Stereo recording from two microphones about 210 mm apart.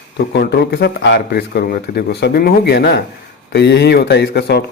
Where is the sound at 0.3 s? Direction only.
50° left (ahead or behind).